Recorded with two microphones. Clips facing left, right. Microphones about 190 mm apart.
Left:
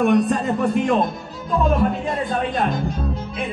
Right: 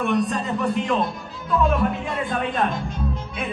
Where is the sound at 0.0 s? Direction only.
50° left (ahead or behind).